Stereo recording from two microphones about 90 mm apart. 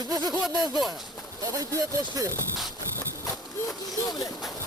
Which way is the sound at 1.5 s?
40° right (ahead or behind).